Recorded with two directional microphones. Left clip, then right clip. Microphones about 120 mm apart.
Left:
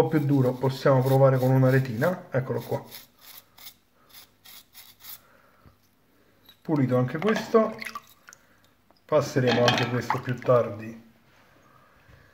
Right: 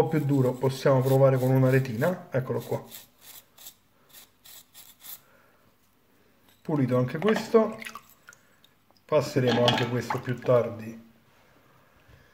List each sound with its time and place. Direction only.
0.0 s speech: 5° right (ahead or behind)
6.6 s speech: 5° right (ahead or behind)
7.7 s drip: 25° right (ahead or behind)
9.0 s speech: 5° right (ahead or behind)